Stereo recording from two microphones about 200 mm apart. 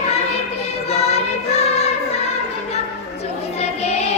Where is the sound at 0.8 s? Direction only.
30° left (ahead or behind).